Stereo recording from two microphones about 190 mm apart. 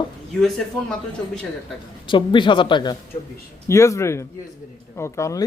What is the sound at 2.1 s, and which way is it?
Speech, 25° left (ahead or behind).